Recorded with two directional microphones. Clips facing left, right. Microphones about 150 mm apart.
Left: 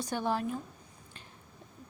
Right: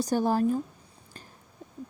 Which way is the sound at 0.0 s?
40° right (ahead or behind).